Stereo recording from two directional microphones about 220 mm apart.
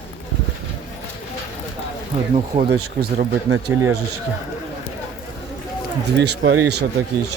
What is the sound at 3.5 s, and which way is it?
Speech, 65° right (ahead or behind).